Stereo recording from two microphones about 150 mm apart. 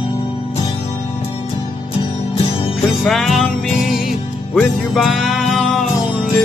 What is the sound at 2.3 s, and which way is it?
Music, 40° left (ahead or behind).